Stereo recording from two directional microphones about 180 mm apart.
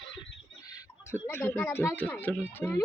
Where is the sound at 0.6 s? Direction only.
20° left (ahead or behind).